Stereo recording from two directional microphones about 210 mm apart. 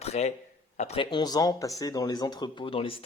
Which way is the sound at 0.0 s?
30° left (ahead or behind).